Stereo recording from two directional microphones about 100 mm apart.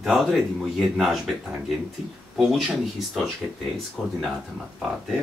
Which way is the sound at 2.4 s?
Centre (ahead or behind).